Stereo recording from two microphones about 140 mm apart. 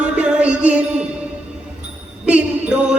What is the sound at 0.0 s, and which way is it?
Music, 10° right (ahead or behind).